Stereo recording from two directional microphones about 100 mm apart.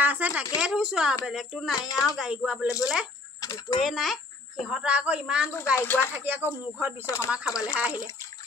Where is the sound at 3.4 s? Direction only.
40° left (ahead or behind).